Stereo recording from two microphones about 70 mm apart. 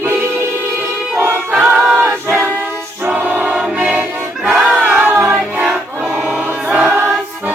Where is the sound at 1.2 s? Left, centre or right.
Right.